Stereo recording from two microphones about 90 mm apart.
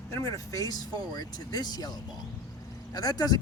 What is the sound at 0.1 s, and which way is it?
Speech, 35° left (ahead or behind).